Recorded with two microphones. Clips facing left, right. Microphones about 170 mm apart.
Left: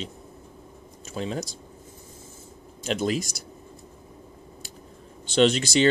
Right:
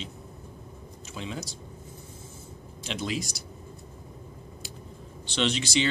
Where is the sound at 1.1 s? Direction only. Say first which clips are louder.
Left 6 dB; 40° left (ahead or behind).